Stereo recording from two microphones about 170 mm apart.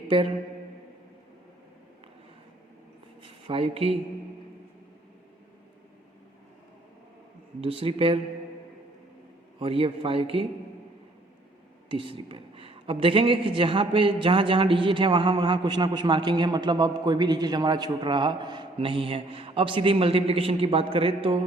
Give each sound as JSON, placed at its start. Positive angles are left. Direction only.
{"t": 3.2, "sound": "speech", "side_deg": -30}
{"t": 7.6, "sound": "speech", "side_deg": -35}
{"t": 9.6, "sound": "speech", "side_deg": -35}
{"t": 11.9, "sound": "speech", "side_deg": -30}